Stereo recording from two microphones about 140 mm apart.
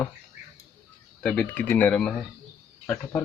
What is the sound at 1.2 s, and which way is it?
Speech, 10° left (ahead or behind).